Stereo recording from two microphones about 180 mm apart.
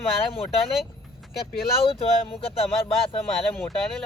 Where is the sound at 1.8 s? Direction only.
30° left (ahead or behind).